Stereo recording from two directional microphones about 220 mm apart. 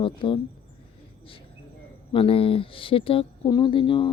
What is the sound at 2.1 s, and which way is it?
Speech, 25° left (ahead or behind).